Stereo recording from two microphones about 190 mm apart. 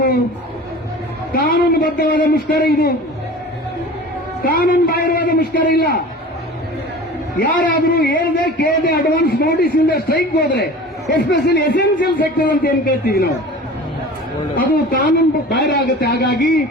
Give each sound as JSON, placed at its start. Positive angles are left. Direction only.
{"t": 1.3, "sound": "a man's voice", "side_deg": 50}
{"t": 4.4, "sound": "a man's voice", "side_deg": 45}
{"t": 7.3, "sound": "a man's voice", "side_deg": 45}
{"t": 7.7, "sound": "a man's voice", "side_deg": 65}
{"t": 8.1, "sound": "a man's voice", "side_deg": 55}
{"t": 11.9, "sound": "a man's voice", "side_deg": 50}
{"t": 14.5, "sound": "a man's voice", "side_deg": 50}
{"t": 15.7, "sound": "a man's voice", "side_deg": 60}